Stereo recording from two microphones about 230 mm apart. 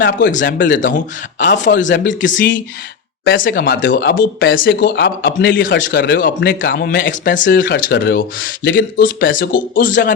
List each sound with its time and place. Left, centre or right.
0.4 s speech: left
1.5 s speech: left